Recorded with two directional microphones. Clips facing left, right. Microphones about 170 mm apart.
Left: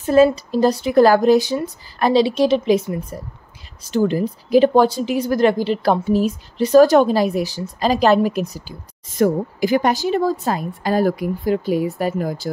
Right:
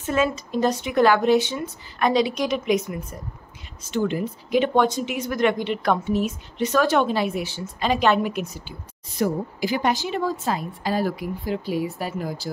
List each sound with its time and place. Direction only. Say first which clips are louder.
0.0 s speech: left 9 dB; 35° left (ahead or behind)